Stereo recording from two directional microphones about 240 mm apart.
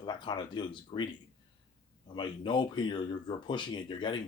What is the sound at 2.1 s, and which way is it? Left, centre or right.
Speech, centre.